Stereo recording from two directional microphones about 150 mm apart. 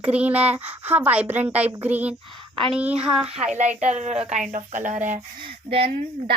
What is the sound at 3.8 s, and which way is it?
Speech, 50° right (ahead or behind).